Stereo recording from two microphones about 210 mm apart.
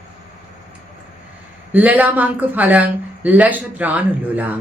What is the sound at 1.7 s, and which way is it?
A woman's voice, 10° right (ahead or behind).